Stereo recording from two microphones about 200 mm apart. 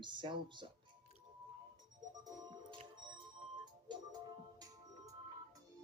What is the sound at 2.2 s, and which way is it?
Music, 25° right (ahead or behind).